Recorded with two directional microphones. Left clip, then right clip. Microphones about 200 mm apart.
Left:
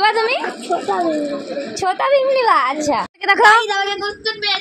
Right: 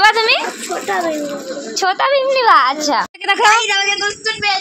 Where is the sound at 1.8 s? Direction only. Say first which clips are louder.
Right 1 dB; 10° right (ahead or behind).